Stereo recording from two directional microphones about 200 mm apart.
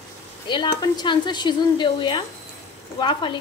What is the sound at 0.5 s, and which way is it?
A woman's voice, 20° left (ahead or behind).